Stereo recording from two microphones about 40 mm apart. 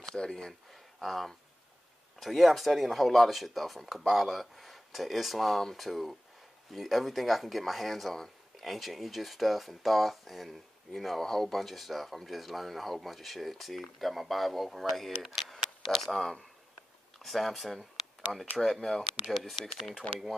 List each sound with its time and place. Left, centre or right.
0.1 s speech: centre
0.9 s speech: centre
15.4 s a sound: centre
17.2 s speech: centre
18.8 s speech: centre
20.0 s speech: left